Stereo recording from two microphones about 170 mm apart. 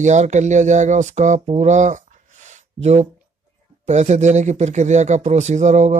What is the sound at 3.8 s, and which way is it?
Speech, 40° right (ahead or behind).